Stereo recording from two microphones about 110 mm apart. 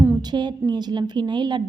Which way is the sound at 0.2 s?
40° right (ahead or behind).